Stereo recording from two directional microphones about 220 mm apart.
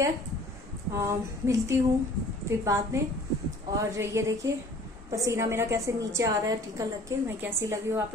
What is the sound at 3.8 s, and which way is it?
A woman's voice, 15° right (ahead or behind).